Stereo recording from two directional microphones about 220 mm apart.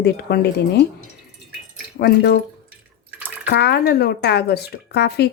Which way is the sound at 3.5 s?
50° left (ahead or behind).